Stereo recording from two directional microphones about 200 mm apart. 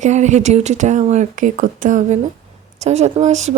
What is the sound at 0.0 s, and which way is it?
Speech, 35° right (ahead or behind).